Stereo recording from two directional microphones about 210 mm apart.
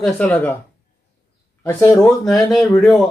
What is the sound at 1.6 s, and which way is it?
Speech, 10° left (ahead or behind).